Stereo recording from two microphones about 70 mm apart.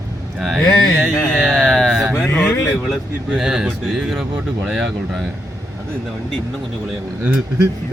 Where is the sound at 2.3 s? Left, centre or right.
Left.